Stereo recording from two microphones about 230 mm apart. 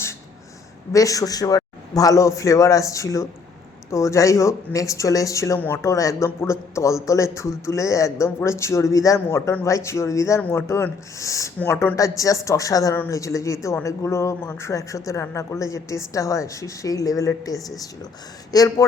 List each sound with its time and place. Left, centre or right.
0.9 s speech: centre